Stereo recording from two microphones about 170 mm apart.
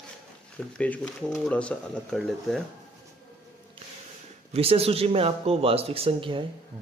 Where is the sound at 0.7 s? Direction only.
5° left (ahead or behind).